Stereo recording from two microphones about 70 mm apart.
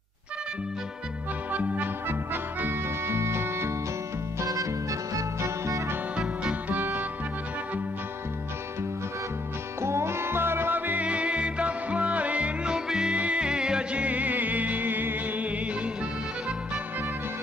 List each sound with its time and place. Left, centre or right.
1.5 s music: right
4.4 s music: right
6.1 s music: right
9.8 s music: right; by 15.9 s centre